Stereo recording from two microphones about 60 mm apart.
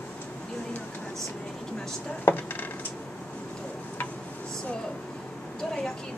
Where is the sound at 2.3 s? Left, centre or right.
Left.